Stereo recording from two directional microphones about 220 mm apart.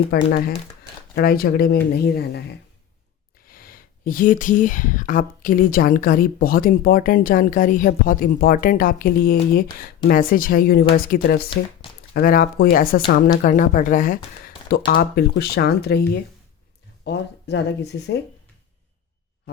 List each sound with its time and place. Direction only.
0.1 s speech: 45° left (ahead or behind)
11.4 s speech: 20° left (ahead or behind)
12.1 s speech: 40° left (ahead or behind)